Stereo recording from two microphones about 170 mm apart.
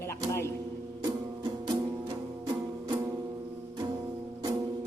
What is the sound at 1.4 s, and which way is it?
Music, 25° right (ahead or behind).